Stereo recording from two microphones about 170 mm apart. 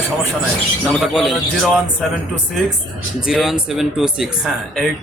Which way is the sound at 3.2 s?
5° right (ahead or behind).